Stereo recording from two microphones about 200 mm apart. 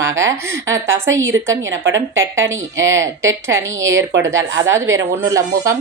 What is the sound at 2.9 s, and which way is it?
Speech, 15° right (ahead or behind).